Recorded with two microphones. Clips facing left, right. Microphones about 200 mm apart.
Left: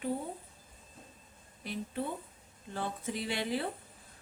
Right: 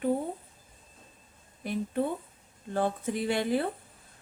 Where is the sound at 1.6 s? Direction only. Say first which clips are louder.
Right 7 dB; 50° right (ahead or behind).